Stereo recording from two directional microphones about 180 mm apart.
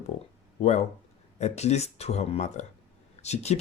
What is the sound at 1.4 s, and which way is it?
Speech, 35° left (ahead or behind).